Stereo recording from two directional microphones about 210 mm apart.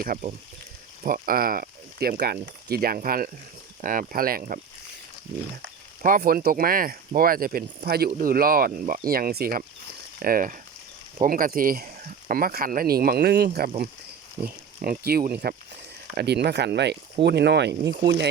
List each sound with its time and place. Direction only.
0.0 s speech: 40° right (ahead or behind)
6.0 s speech: 40° right (ahead or behind)